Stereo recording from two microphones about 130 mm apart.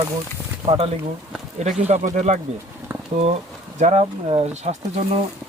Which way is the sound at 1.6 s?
60° right (ahead or behind).